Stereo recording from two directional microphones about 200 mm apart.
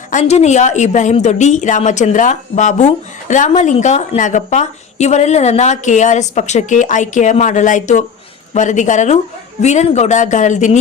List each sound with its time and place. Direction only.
0.1 s a woman's voice: 35° left (ahead or behind)